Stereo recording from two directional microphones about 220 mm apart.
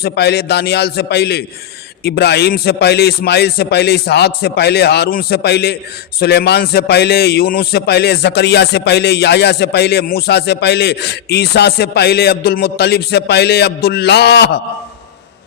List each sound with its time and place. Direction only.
0.0 s a man's voice: 50° left (ahead or behind)